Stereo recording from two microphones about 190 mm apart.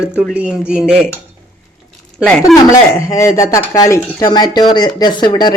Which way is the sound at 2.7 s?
15° left (ahead or behind).